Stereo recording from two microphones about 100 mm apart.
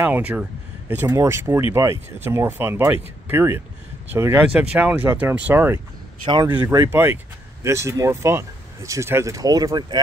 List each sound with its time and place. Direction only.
0.0 s speech: 15° right (ahead or behind)
4.6 s speech: 10° right (ahead or behind)
6.2 s speech: 50° right (ahead or behind)
6.7 s speech: 25° right (ahead or behind)